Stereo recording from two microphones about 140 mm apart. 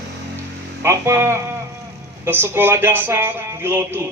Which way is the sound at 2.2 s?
15° right (ahead or behind).